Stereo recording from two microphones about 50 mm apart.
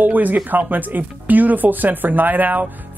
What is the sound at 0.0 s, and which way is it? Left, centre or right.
Speech, right.